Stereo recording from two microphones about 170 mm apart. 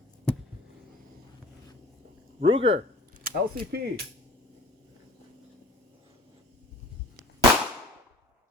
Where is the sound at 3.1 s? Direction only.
60° right (ahead or behind).